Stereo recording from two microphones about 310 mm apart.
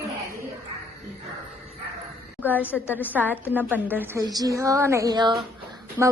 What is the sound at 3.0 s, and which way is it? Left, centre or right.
A woman's voice, centre.